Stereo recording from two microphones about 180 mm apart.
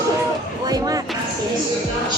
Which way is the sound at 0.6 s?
20° right (ahead or behind).